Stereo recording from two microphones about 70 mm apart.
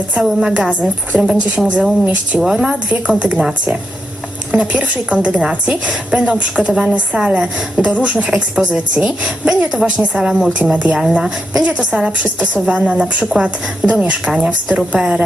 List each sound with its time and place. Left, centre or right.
0.1 s a woman's voice: centre
1.1 s a woman's voice: centre
10.6 s speech: centre
10.9 s a woman's voice: centre
11.6 s a woman's voice: centre